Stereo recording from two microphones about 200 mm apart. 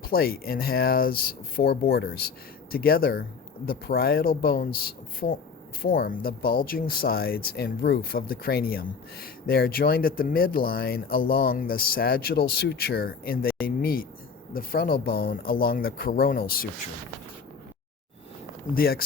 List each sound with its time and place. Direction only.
0.0 s speech: 50° left (ahead or behind)
18.7 s speech: 45° left (ahead or behind)